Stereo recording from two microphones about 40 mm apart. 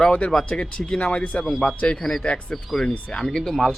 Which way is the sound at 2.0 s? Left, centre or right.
Centre.